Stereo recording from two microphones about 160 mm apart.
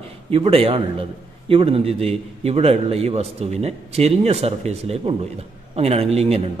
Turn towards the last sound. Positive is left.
turn(degrees=-40)  # may be behind; listen again after turning